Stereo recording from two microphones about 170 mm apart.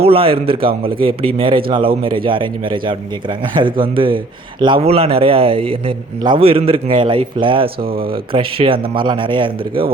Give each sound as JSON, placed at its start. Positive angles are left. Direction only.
{"t": 0.0, "sound": "a man's voice", "side_deg": -35}
{"t": 7.8, "sound": "speech", "side_deg": -60}
{"t": 8.1, "sound": "a man's voice", "side_deg": -30}